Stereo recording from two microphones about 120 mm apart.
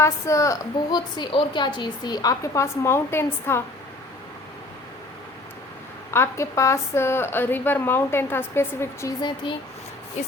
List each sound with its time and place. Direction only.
0.0 s a woman's voice: 25° left (ahead or behind)
6.1 s a woman's voice: 20° left (ahead or behind)
9.2 s speech: 40° left (ahead or behind)